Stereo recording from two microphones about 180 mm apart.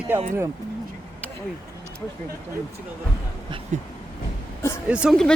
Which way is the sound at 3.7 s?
45° right (ahead or behind).